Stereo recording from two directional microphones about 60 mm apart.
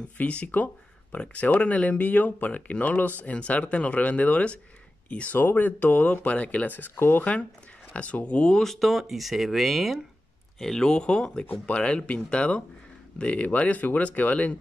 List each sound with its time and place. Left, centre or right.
0.2 s speech: left
5.4 s speech: left
7.9 s speech: left; by 9.9 s centre
10.6 s speech: centre; by 14.6 s left